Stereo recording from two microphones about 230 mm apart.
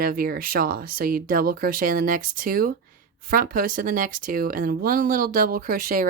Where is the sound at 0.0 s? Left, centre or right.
Right.